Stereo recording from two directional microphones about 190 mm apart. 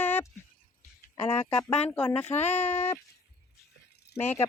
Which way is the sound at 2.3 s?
35° left (ahead or behind).